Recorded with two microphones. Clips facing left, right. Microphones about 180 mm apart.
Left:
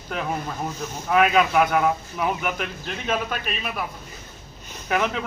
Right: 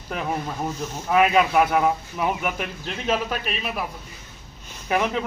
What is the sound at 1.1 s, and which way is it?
A man's voice, 5° right (ahead or behind).